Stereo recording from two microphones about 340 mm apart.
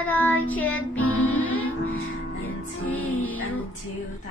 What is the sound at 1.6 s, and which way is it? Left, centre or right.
Music, left.